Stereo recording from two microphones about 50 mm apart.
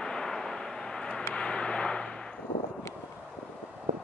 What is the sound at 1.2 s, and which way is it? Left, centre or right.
Vehicle, left.